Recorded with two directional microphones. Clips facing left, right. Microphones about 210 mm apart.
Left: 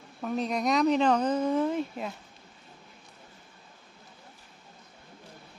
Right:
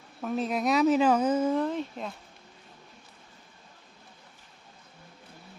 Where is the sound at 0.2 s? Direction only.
Centre (ahead or behind).